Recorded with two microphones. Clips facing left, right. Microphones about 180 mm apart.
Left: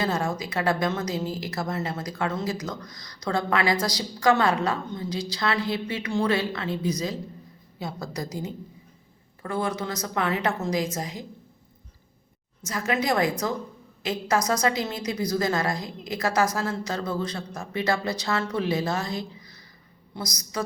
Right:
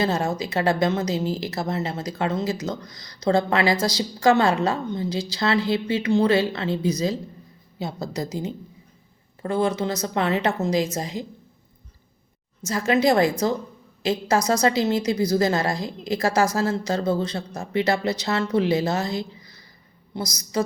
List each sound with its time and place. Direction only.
0.0 s speech: 25° right (ahead or behind)
12.6 s speech: 30° right (ahead or behind)